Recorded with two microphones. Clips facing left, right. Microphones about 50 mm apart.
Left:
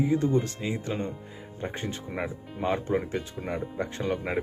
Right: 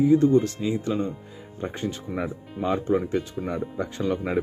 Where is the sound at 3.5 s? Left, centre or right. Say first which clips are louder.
Even; left.